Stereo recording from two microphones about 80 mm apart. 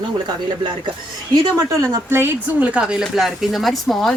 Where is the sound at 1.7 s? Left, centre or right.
Right.